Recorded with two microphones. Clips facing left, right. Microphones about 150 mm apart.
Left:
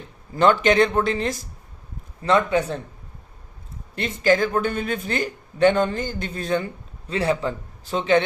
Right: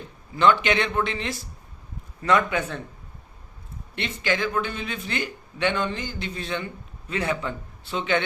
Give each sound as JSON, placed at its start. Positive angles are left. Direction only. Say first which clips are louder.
{"t": 0.3, "sound": "speech", "louder": "left 4 dB", "side_deg": 45}
{"t": 2.2, "sound": "a man's voice", "louder": "left 3 dB", "side_deg": 30}
{"t": 3.9, "sound": "speech", "louder": "left 7 dB", "side_deg": 40}
{"t": 7.1, "sound": "a man's voice", "louder": "left 4 dB", "side_deg": 30}